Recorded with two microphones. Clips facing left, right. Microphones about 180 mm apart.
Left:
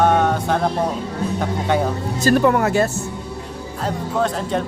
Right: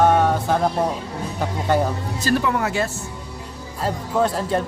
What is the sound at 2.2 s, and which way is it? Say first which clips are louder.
Speech: left 6 dB; 50° left (ahead or behind).